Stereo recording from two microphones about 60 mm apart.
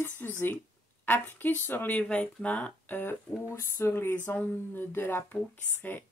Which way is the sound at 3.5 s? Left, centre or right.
Left.